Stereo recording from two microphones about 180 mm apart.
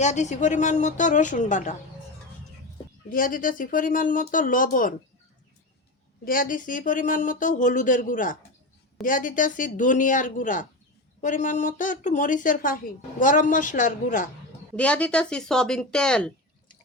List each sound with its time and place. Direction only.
0.0 s a woman's voice: 40° left (ahead or behind)
3.1 s a woman's voice: 50° left (ahead or behind)
6.2 s a woman's voice: 50° left (ahead or behind)
14.8 s speech: 5° left (ahead or behind)